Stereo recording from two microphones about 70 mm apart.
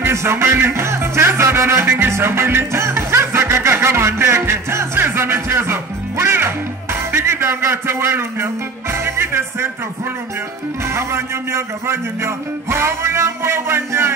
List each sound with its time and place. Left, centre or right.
0.0 s a man's voice: right
0.6 s music: right
10.9 s a man's voice: right